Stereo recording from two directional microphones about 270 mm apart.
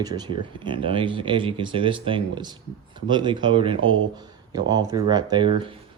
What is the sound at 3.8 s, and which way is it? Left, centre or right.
Speech, right.